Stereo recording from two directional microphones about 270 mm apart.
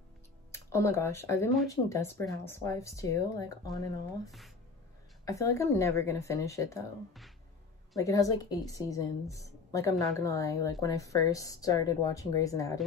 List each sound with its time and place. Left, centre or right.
0.5 s a woman's voice: centre
8.0 s a woman's voice: centre